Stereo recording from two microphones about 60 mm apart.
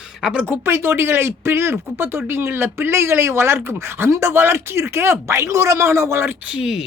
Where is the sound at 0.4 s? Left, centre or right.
Right.